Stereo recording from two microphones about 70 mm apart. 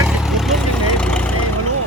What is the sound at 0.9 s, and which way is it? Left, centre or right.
Vehicle, centre.